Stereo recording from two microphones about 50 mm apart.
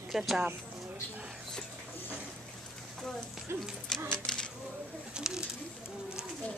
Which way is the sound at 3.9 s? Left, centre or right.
Centre.